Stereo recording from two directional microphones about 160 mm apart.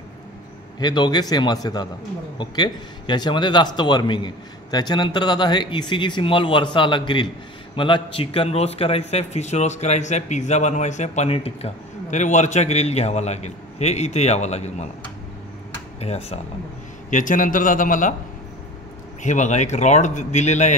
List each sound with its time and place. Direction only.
0.7 s a man's voice: 25° left (ahead or behind); by 14.9 s 45° left (ahead or behind)
16.0 s speech: 40° left (ahead or behind)
17.1 s a man's voice: 55° left (ahead or behind)
19.2 s a man's voice: 50° left (ahead or behind)